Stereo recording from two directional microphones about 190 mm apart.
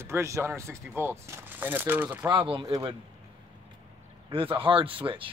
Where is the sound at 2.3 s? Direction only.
25° right (ahead or behind).